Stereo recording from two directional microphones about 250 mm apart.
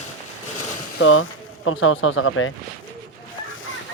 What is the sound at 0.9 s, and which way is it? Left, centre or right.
Speech, left.